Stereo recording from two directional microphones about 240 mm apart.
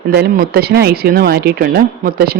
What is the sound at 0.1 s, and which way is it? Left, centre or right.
Speech, right.